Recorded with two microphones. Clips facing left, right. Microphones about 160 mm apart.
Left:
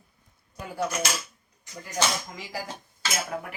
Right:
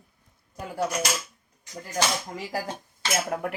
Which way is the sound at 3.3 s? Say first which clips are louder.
Right 4 dB; 55° right (ahead or behind).